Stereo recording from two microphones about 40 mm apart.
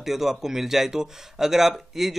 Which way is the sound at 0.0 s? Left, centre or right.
Centre.